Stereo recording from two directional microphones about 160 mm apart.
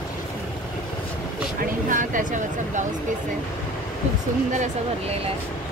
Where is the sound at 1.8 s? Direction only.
55° right (ahead or behind).